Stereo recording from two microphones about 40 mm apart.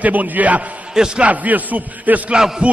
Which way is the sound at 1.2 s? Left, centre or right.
Right.